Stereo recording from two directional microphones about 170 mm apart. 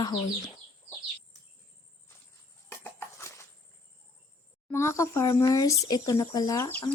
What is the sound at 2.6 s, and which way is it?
Horse, 15° left (ahead or behind).